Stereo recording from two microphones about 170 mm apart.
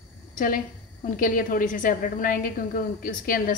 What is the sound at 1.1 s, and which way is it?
A woman's voice, 55° left (ahead or behind).